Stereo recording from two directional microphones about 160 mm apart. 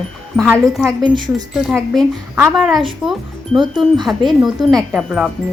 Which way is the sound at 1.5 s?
Centre (ahead or behind).